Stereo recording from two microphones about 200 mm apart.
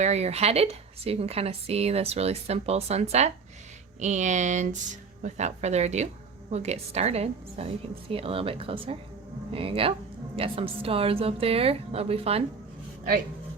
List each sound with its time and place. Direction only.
0.0 s a woman's voice: 35° right (ahead or behind)